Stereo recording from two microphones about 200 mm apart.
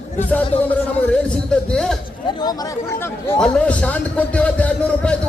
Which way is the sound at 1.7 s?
5° left (ahead or behind).